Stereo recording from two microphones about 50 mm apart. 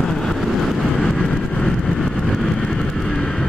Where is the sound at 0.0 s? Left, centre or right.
Centre.